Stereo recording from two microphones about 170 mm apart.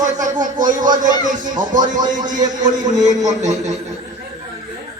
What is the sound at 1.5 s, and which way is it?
Speech, 50° right (ahead or behind).